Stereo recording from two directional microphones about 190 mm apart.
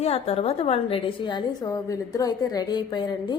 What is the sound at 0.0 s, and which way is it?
A woman's voice, 30° left (ahead or behind).